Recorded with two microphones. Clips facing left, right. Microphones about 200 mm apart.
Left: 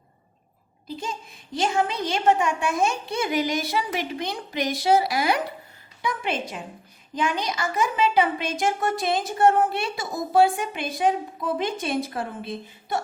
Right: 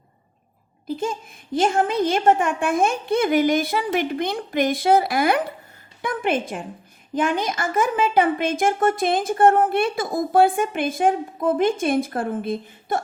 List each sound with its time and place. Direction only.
0.9 s a woman's voice: 50° right (ahead or behind)